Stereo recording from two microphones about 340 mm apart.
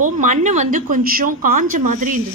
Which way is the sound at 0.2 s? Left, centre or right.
Right.